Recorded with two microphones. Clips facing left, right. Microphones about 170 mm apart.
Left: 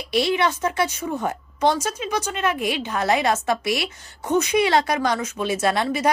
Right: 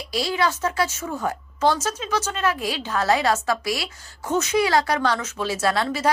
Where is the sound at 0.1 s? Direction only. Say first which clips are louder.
Left 3 dB; 25° left (ahead or behind).